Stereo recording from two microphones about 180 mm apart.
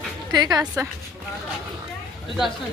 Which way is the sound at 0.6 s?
5° right (ahead or behind).